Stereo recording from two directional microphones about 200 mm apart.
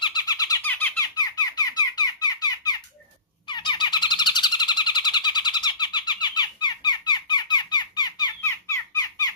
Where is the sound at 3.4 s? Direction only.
20° left (ahead or behind).